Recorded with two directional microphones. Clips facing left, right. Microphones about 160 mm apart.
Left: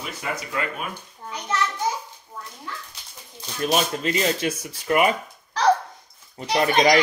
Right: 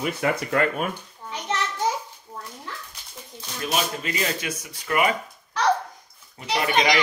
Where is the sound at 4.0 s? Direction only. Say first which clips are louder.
Left 5 dB; 30° left (ahead or behind).